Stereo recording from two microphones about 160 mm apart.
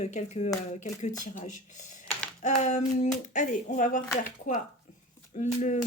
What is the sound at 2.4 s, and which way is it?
Speech, 50° left (ahead or behind).